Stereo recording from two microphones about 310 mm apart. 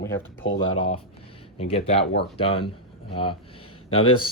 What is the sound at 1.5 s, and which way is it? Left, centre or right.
Speech, centre.